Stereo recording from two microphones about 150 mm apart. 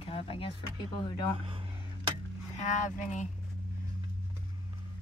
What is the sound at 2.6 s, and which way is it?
Speech, 55° left (ahead or behind).